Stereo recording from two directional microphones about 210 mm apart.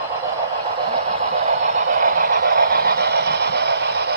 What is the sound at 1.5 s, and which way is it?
Vehicle, 35° right (ahead or behind).